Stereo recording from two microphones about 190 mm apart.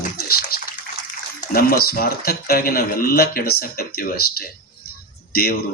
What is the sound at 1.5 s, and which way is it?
A man's voice, 50° left (ahead or behind).